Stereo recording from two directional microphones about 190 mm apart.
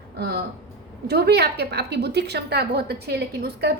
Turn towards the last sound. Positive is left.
turn(degrees=-60)  # may be behind; listen again after turning